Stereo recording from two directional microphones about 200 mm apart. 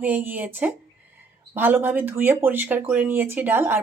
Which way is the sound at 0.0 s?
10° right (ahead or behind).